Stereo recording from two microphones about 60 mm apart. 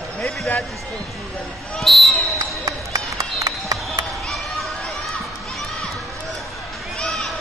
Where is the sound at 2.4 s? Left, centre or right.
Right.